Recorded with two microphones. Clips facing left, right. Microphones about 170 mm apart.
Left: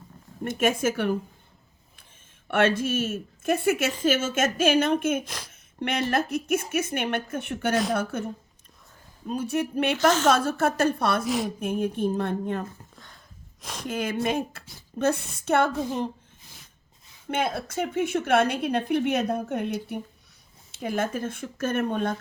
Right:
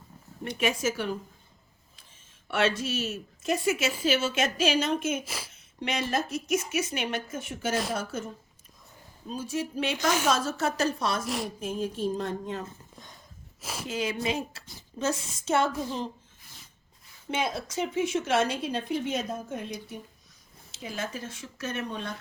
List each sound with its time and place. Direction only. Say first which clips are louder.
0.4 s speech: left 4 dB; 50° left (ahead or behind)
2.5 s a woman's voice: left 4 dB; 55° left (ahead or behind)
5.2 s speech: even; 5° right (ahead or behind)
5.5 s a woman's voice: left 3 dB; 55° left (ahead or behind)
9.3 s a woman's voice: left 5 dB; 60° left (ahead or behind)
11.3 s speech: left 5 dB; centre (ahead or behind)
11.6 s a woman's voice: left 4 dB; 60° left (ahead or behind)
13.6 s speech: right 1 dB; 5° right (ahead or behind)
13.8 s a woman's voice: left 3 dB; 55° left (ahead or behind)
17.3 s a woman's voice: left 3 dB; 55° left (ahead or behind)